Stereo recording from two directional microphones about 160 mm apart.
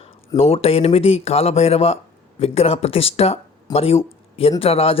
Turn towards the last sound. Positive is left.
turn(degrees=40)  # may be behind; listen again after turning